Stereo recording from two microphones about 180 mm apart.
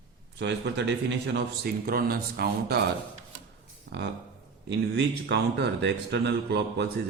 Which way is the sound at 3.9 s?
90° right.